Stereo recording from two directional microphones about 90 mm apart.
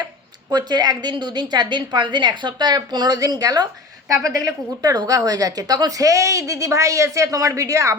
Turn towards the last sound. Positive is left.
turn(degrees=-35)  # may be behind; listen again after turning